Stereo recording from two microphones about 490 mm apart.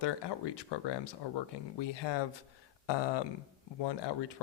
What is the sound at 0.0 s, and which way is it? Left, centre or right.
Speech, left.